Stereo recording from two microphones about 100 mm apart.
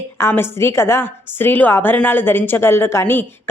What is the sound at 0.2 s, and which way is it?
A woman's voice, 25° left (ahead or behind).